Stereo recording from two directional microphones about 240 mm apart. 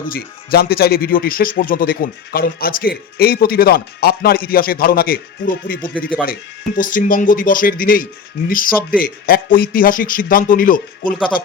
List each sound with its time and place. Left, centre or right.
0.1 s speech: left